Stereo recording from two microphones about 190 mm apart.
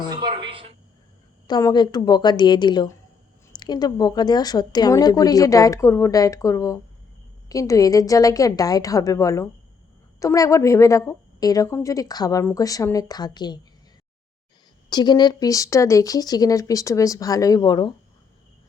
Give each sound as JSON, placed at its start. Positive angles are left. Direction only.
{"t": 0.1, "sound": "a sound", "side_deg": -25}
{"t": 1.5, "sound": "a woman's voice", "side_deg": 20}
{"t": 14.8, "sound": "a woman's voice", "side_deg": 20}